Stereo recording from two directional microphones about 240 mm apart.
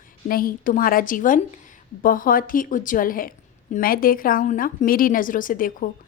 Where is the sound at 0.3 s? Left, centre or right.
Left.